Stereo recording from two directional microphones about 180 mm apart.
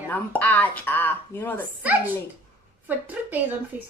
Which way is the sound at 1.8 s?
10° right (ahead or behind).